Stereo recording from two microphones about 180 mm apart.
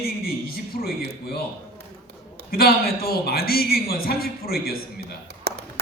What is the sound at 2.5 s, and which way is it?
A man's voice, 55° left (ahead or behind).